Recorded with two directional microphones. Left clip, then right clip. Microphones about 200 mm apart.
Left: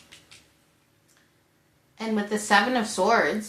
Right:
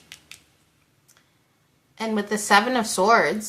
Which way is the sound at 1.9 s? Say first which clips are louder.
Right 2 dB; 25° right (ahead or behind).